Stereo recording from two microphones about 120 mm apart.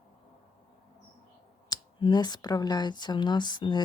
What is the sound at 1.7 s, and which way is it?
A woman's voice, 40° left (ahead or behind).